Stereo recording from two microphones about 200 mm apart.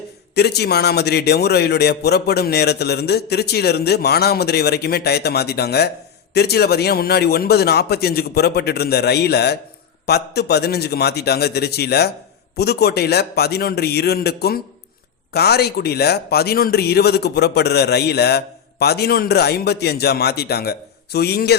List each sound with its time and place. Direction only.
0.3 s a man's voice: 55° left (ahead or behind)